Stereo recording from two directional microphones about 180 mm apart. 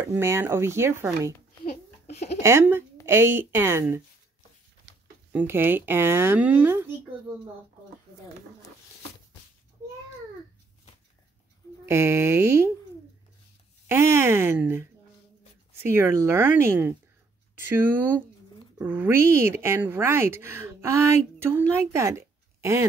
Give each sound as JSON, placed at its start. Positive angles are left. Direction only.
{"t": 0.0, "sound": "speech", "side_deg": -15}
{"t": 2.0, "sound": "a sound", "side_deg": 40}
{"t": 2.4, "sound": "speech", "side_deg": -15}
{"t": 5.3, "sound": "speech", "side_deg": -10}
{"t": 11.8, "sound": "speech", "side_deg": -15}
{"t": 13.8, "sound": "speech", "side_deg": -15}